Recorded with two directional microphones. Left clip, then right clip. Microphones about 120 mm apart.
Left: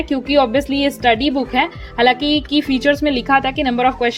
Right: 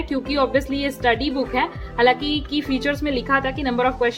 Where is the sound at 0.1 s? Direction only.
60° left (ahead or behind).